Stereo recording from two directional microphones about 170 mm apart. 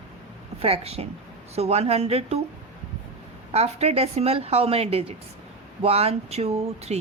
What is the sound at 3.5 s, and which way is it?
Speech, 40° right (ahead or behind).